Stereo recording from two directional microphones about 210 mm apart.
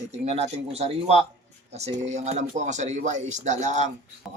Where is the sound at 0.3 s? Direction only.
30° right (ahead or behind).